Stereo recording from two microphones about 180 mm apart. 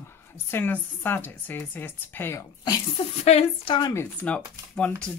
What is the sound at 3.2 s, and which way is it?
Speech, 35° left (ahead or behind).